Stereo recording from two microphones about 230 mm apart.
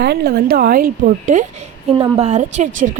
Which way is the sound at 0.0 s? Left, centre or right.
Right.